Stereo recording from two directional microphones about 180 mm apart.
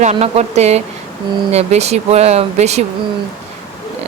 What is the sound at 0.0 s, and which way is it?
Speech, 35° right (ahead or behind).